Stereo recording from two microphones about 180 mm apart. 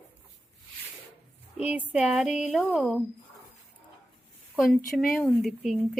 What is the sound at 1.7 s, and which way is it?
A woman's voice, 10° right (ahead or behind).